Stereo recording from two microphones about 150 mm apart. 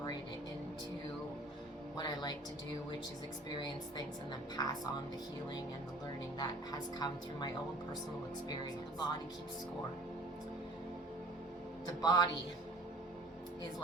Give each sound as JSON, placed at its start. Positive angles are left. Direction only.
{"t": 2.0, "sound": "music", "side_deg": 30}
{"t": 3.6, "sound": "a woman's voice", "side_deg": 30}
{"t": 6.4, "sound": "a woman's voice", "side_deg": 25}
{"t": 8.6, "sound": "a woman's voice", "side_deg": 30}
{"t": 12.0, "sound": "a woman's voice", "side_deg": 30}